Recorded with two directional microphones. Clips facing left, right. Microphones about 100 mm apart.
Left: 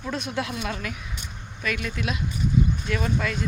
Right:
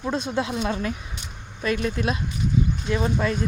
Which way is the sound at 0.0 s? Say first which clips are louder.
Right 4 dB; 30° right (ahead or behind).